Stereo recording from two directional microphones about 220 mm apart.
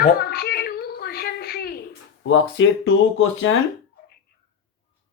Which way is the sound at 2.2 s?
60° left (ahead or behind).